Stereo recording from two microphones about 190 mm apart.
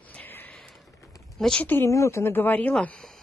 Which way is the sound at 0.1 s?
10° left (ahead or behind).